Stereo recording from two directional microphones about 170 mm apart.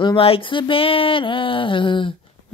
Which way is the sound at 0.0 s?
30° left (ahead or behind).